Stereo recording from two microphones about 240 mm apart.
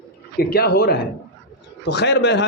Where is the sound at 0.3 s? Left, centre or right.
Left.